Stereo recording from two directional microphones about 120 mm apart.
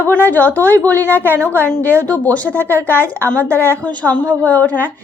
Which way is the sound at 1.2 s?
20° right (ahead or behind).